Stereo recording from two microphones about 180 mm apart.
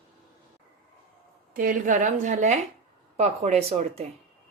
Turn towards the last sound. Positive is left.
turn(degrees=-35)  # may be behind; listen again after turning